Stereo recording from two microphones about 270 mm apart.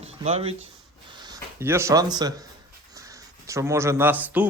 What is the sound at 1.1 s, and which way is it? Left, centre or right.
Speech, centre.